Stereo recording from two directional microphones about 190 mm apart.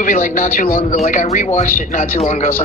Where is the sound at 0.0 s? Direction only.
45° left (ahead or behind).